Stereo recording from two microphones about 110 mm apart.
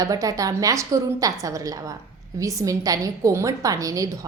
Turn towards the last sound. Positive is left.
turn(degrees=-30)  # may be behind; listen again after turning